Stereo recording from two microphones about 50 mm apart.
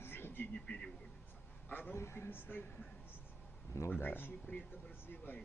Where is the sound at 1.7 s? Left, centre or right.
Left.